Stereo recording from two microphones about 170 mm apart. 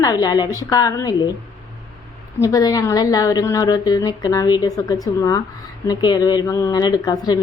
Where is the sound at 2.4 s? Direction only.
20° left (ahead or behind).